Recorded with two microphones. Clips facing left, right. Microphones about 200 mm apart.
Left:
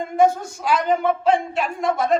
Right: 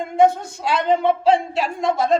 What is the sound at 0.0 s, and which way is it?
Speech, 25° right (ahead or behind).